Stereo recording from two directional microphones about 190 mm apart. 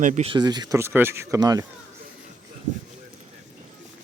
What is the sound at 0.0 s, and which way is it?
Speech, 40° right (ahead or behind).